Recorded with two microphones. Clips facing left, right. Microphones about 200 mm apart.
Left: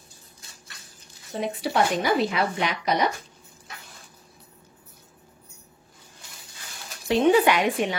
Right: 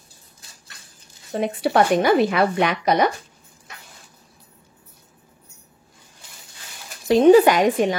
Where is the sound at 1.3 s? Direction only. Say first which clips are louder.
Right 5 dB; 55° right (ahead or behind).